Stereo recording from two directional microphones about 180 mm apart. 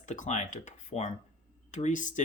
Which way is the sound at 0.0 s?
40° left (ahead or behind).